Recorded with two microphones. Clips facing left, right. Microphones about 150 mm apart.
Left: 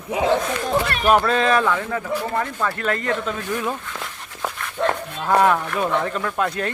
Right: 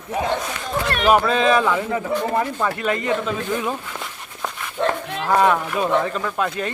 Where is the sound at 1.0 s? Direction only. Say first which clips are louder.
Right 2 dB; 5° right (ahead or behind).